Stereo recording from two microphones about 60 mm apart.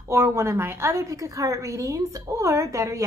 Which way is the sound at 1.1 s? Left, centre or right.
Right.